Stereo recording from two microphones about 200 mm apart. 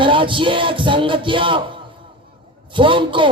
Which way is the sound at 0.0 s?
25° right (ahead or behind).